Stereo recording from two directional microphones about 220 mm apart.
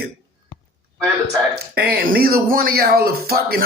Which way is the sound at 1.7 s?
45° right (ahead or behind).